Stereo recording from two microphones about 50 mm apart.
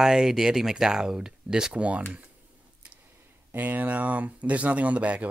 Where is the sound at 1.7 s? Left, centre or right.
Right.